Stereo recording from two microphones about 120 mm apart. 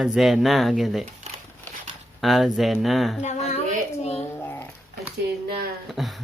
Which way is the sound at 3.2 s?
70° left (ahead or behind).